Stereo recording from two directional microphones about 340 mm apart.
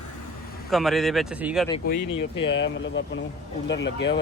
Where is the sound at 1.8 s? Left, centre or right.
Left.